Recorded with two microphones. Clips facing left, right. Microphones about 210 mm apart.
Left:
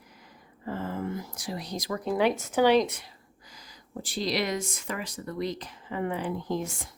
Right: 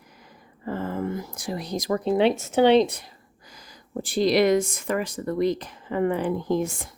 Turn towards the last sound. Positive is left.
turn(degrees=-55)  # may be behind; listen again after turning